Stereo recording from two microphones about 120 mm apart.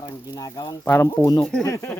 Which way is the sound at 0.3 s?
30° left (ahead or behind).